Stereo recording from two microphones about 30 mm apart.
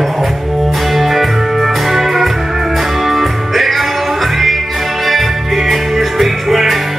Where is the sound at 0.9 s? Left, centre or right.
Centre.